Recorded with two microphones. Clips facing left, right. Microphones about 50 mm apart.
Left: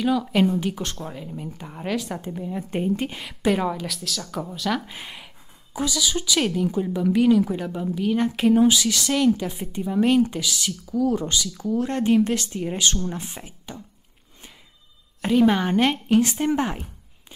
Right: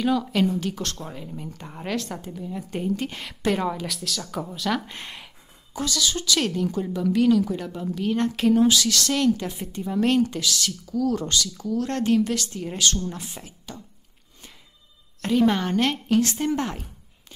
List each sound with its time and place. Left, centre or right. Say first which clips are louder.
0.0 s a woman's voice: left 1 dB; centre
0.3 s a woman's voice: left 2 dB; left
0.9 s a woman's voice: left 2 dB; centre
2.2 s a woman's voice: left 3 dB; left
3.1 s a woman's voice: left 2 dB; centre
12.2 s a woman's voice: left 3 dB; left
15.2 s a woman's voice: left 2 dB; centre